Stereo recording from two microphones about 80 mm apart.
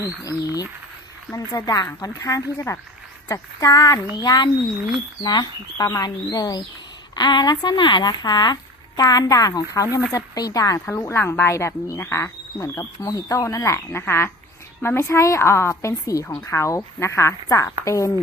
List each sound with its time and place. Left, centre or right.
0.0 s speech: left
1.5 s speech: left
2.1 s a woman's voice: left
4.1 s speech: left
7.2 s a woman's voice: left
11.2 s a woman's voice: left